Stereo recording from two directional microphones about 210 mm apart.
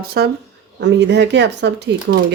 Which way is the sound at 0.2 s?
50° right (ahead or behind).